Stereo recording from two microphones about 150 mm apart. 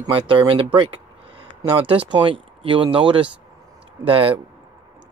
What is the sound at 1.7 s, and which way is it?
Speech, 35° right (ahead or behind).